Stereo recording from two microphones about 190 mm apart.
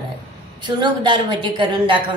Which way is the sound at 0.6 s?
25° right (ahead or behind).